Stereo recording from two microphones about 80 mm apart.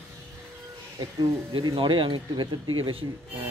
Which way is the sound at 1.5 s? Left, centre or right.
Right.